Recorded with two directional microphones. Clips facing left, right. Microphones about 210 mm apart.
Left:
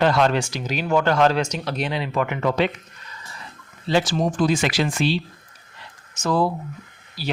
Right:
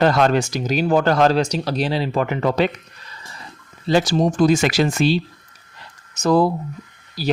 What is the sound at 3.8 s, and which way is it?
Speech, 40° right (ahead or behind).